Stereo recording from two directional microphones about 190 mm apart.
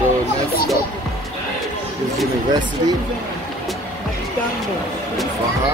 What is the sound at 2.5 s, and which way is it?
Speech, 20° right (ahead or behind).